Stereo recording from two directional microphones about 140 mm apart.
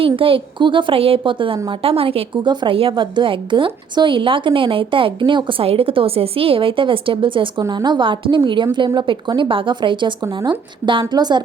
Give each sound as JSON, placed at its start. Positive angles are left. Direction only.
{"t": 0.0, "sound": "a woman's voice", "side_deg": -40}